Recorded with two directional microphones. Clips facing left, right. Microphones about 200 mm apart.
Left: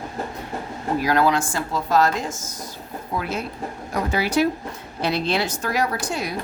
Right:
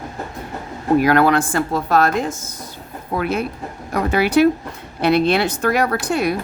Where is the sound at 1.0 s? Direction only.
60° right (ahead or behind).